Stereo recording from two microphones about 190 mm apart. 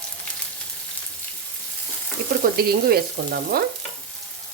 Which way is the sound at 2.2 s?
55° right (ahead or behind).